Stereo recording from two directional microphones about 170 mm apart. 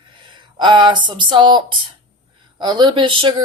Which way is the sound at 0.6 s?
25° right (ahead or behind).